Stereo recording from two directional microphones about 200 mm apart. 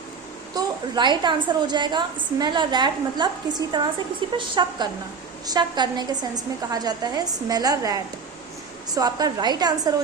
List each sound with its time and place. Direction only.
0.5 s a woman's voice: 20° right (ahead or behind)
3.5 s a woman's voice: 40° right (ahead or behind)
4.4 s a woman's voice: 25° right (ahead or behind)